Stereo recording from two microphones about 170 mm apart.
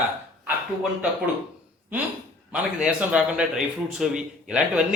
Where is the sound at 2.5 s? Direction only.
10° right (ahead or behind).